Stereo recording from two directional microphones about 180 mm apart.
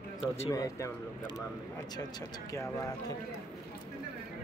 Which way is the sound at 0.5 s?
20° left (ahead or behind).